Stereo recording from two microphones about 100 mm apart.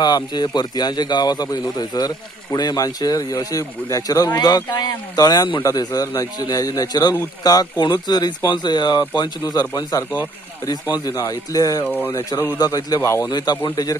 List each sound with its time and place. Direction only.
0.0 s a man's voice: 45° left (ahead or behind)
11.1 s a man's voice: 35° left (ahead or behind)
11.8 s speech: 20° left (ahead or behind)
12.5 s a man's voice: 40° left (ahead or behind)